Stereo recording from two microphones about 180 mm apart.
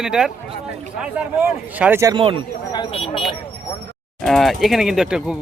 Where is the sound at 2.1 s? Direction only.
30° right (ahead or behind).